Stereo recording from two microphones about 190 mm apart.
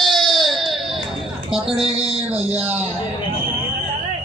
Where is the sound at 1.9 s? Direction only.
30° right (ahead or behind).